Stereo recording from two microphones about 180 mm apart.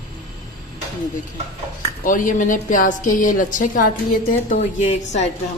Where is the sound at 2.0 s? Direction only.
45° left (ahead or behind).